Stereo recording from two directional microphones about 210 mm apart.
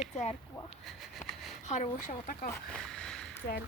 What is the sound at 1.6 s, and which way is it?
Speech, 35° left (ahead or behind).